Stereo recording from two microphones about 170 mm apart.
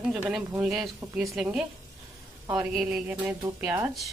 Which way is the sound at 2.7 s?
Centre (ahead or behind).